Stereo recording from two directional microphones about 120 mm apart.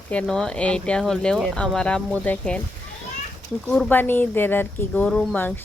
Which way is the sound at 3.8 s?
15° left (ahead or behind).